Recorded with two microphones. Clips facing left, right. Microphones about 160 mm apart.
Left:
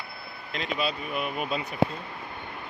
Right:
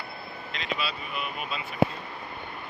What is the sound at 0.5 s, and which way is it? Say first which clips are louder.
Speech: left 4 dB; 50° left (ahead or behind).